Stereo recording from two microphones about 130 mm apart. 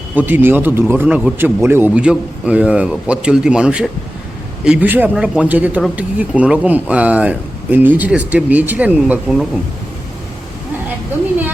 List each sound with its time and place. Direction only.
0.1 s a man's voice: 15° right (ahead or behind)